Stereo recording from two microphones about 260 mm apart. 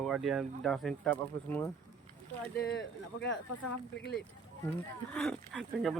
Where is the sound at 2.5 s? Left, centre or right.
Left.